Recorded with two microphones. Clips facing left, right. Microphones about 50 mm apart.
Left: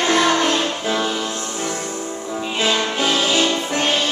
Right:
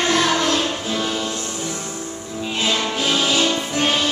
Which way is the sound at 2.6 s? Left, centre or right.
Centre.